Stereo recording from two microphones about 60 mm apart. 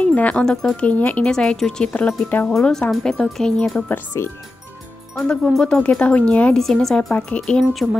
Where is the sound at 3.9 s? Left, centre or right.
Left.